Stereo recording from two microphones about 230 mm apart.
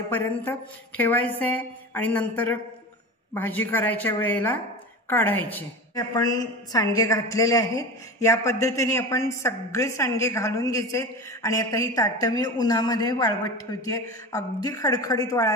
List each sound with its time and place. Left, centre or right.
0.1 s a woman's voice: centre